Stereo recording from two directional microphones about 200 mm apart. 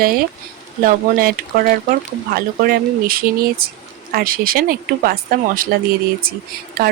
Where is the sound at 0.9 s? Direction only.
45° right (ahead or behind).